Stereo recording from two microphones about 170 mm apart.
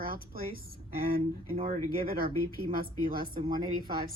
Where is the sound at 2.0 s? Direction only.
60° right (ahead or behind).